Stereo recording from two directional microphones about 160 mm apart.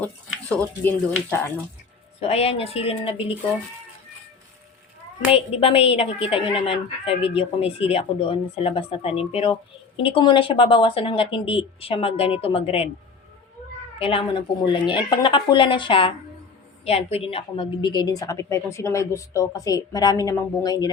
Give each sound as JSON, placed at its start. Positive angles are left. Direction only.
{"t": 0.0, "sound": "speech", "side_deg": 10}
{"t": 2.2, "sound": "a woman's voice", "side_deg": 40}
{"t": 5.3, "sound": "a woman's voice", "side_deg": 35}
{"t": 14.0, "sound": "a woman's voice", "side_deg": 35}